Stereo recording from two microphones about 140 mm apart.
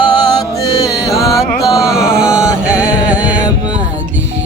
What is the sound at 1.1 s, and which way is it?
Music, centre (ahead or behind).